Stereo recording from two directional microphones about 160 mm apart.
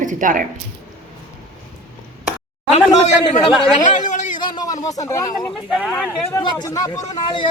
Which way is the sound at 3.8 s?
50° left (ahead or behind).